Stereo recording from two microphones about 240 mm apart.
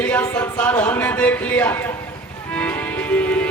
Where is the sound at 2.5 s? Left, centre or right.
Centre.